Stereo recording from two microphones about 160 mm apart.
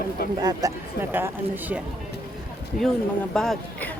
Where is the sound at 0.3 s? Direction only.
25° right (ahead or behind).